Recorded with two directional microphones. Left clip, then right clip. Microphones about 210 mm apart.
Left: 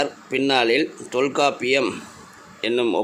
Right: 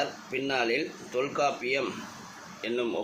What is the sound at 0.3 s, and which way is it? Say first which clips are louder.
Speech: left 11 dB; 45° left (ahead or behind).